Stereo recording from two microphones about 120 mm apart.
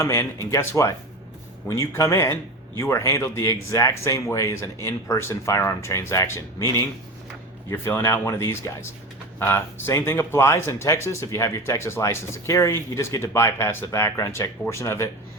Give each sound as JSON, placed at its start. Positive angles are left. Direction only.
{"t": 0.0, "sound": "speech", "side_deg": 20}